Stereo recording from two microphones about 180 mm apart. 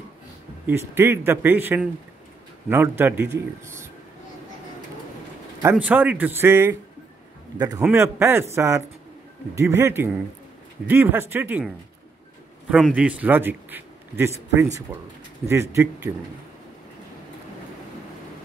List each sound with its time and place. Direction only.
0.7 s speech: 10° right (ahead or behind)
5.6 s a man's voice: 10° right (ahead or behind)